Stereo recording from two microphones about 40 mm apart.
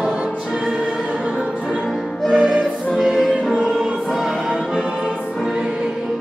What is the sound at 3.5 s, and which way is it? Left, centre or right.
Music, right.